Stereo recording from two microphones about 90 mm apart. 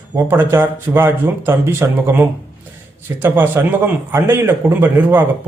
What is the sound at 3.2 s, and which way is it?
A man's voice, 25° right (ahead or behind).